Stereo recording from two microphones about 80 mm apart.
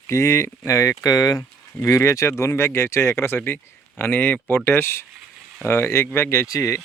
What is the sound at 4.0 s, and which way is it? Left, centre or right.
Speech, left.